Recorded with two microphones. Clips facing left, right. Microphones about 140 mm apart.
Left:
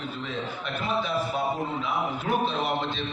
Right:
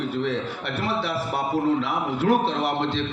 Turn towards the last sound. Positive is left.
turn(degrees=-85)